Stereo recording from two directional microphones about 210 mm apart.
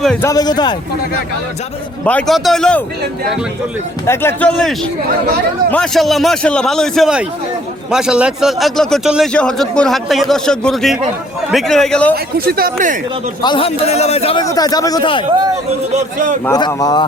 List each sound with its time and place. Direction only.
0.0 s a man's voice: 5° left (ahead or behind)
0.3 s a man's voice: 20° left (ahead or behind)
2.0 s a man's voice: 5° left (ahead or behind)
4.0 s a man's voice: 10° left (ahead or behind)
12.1 s speech: 45° right (ahead or behind)
13.4 s a man's voice: 25° left (ahead or behind)
14.4 s a man's voice: 20° left (ahead or behind)
15.9 s a man's voice: 35° right (ahead or behind)
16.5 s a man's voice: 20° left (ahead or behind)